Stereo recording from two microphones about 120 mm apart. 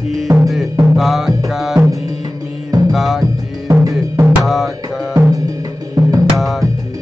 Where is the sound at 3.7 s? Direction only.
25° right (ahead or behind).